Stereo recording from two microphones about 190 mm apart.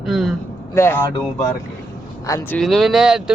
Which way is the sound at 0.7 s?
10° left (ahead or behind).